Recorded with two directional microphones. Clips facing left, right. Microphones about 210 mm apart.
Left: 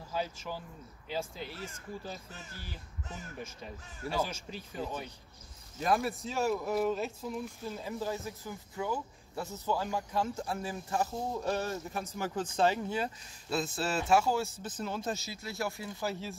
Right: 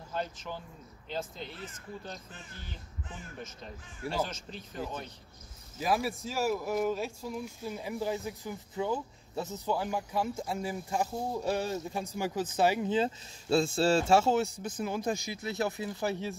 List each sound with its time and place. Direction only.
0.1 s speech: 5° left (ahead or behind)
4.1 s speech: 10° left (ahead or behind)
7.4 s speech: 15° right (ahead or behind)
14.6 s speech: 10° right (ahead or behind)